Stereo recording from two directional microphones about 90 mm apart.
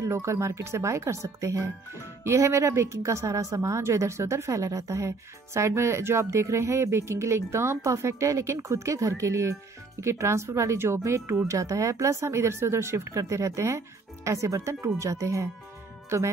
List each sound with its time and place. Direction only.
0.0 s a woman's voice: 30° right (ahead or behind)